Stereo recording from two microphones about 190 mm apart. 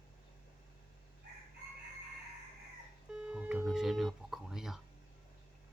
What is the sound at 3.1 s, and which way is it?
Telephone, 5° right (ahead or behind).